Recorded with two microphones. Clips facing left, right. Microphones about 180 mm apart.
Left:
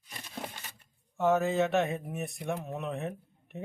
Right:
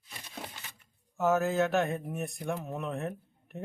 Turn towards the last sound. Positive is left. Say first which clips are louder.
# even
turn(degrees=0)  # may be behind; listen again after turning